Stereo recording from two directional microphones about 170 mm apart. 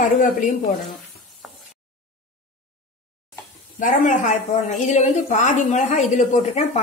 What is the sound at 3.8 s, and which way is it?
Speech, 50° left (ahead or behind).